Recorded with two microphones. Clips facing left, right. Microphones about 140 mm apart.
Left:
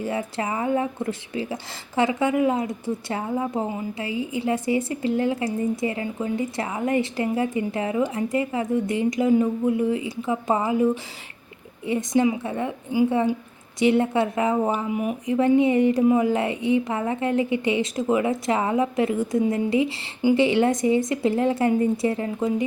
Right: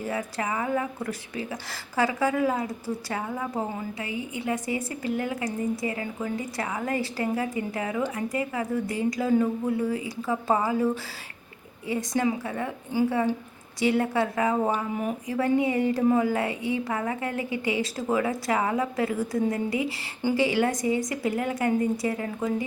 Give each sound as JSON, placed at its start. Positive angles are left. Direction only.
{"t": 0.0, "sound": "a woman's voice", "side_deg": 25}
{"t": 11.9, "sound": "a woman's voice", "side_deg": 20}
{"t": 15.3, "sound": "a woman's voice", "side_deg": 20}